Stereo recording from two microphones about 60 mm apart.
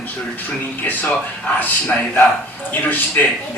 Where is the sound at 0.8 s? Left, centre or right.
Left.